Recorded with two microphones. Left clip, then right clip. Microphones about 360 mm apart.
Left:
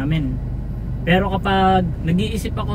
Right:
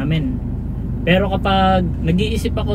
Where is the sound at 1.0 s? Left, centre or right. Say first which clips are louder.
Right 2 dB; centre.